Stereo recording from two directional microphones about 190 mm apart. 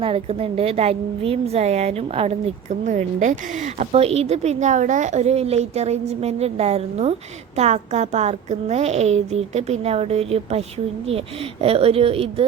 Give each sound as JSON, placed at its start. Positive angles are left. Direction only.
{"t": 0.0, "sound": "a woman's voice", "side_deg": -30}
{"t": 11.6, "sound": "a woman's voice", "side_deg": -30}